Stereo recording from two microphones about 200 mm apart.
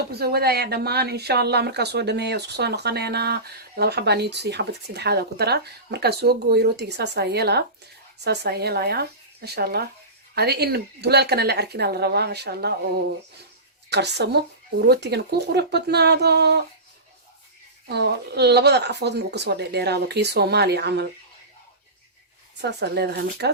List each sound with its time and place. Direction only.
0.1 s speech: 50° right (ahead or behind)
13.9 s speech: 55° right (ahead or behind)
17.8 s speech: 55° right (ahead or behind)
22.6 s speech: 55° right (ahead or behind)